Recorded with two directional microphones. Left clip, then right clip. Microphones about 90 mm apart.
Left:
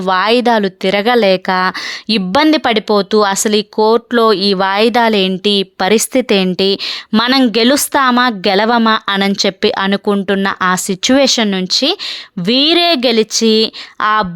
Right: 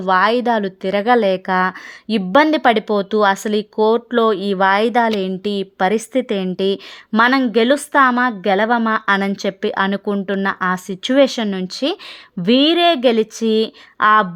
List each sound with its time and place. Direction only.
0.0 s speech: 35° left (ahead or behind)
2.0 s speech: 40° left (ahead or behind)
7.1 s speech: 40° left (ahead or behind)
7.6 s speech: 55° left (ahead or behind)
7.9 s speech: 35° left (ahead or behind)
10.8 s speech: 55° left (ahead or behind)
11.2 s speech: 30° left (ahead or behind)
13.1 s speech: 25° left (ahead or behind)